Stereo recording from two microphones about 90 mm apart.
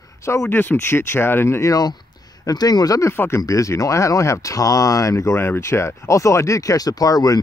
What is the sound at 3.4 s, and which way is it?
Speech, 35° left (ahead or behind).